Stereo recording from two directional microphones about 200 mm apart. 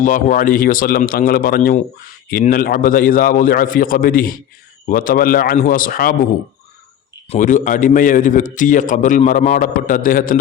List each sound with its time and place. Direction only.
0.0 s speech: 40° left (ahead or behind)
7.3 s a man's voice: 40° left (ahead or behind)